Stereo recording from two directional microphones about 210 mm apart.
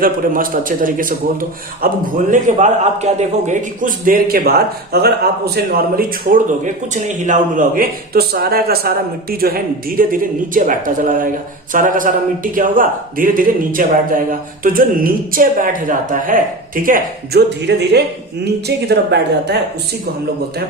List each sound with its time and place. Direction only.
0.0 s a man's voice: 40° right (ahead or behind)